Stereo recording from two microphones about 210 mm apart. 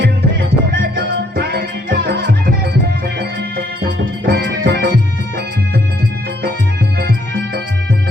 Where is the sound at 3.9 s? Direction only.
60° right (ahead or behind).